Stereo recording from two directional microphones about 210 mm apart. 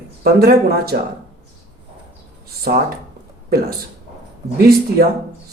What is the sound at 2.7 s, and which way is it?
Speech, 45° right (ahead or behind).